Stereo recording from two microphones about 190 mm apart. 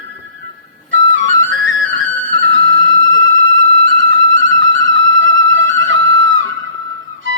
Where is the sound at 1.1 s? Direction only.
90° right.